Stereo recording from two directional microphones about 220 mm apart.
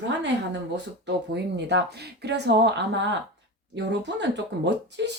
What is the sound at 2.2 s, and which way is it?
Speech, 50° right (ahead or behind).